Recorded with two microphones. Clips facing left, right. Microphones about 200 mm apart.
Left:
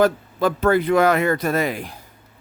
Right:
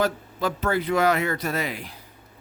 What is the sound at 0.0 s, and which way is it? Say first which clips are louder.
Speech: left 7 dB; 55° left (ahead or behind).